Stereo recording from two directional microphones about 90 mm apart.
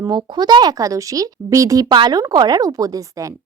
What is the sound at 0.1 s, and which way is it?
Speech, 55° right (ahead or behind).